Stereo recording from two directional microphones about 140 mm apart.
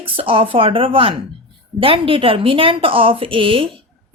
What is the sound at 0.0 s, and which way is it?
Speech, 40° right (ahead or behind).